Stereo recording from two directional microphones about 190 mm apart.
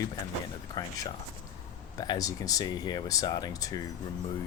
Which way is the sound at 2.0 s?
20° left (ahead or behind).